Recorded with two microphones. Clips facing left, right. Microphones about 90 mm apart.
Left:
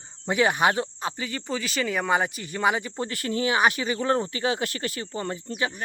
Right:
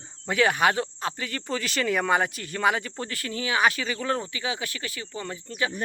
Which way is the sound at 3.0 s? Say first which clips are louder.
Left 3 dB; 20° left (ahead or behind).